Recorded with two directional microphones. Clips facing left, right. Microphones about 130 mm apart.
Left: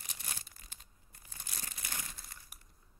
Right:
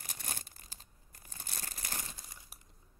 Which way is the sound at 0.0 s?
40° right (ahead or behind).